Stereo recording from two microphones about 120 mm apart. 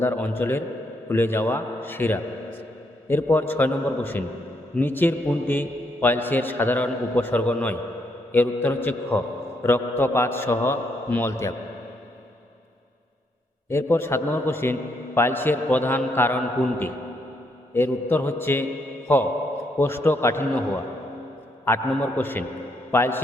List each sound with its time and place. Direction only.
0.0 s a man's voice: 20° left (ahead or behind)
13.7 s a man's voice: 20° left (ahead or behind)